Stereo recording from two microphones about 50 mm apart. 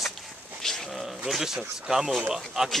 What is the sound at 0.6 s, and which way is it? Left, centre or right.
Speech, centre.